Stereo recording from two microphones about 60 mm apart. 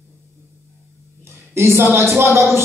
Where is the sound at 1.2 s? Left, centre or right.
Right.